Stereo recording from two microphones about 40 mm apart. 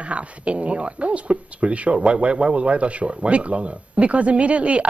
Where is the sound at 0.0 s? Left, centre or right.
Right.